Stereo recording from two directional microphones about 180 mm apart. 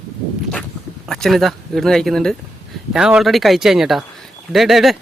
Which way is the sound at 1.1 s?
Centre (ahead or behind).